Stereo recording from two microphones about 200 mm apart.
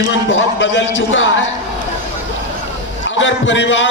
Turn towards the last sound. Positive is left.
turn(degrees=65)  # may be behind; listen again after turning